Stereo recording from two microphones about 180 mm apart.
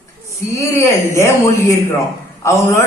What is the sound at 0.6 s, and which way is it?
A man's voice, 15° left (ahead or behind).